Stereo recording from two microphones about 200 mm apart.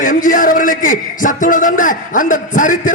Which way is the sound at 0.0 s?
40° left (ahead or behind).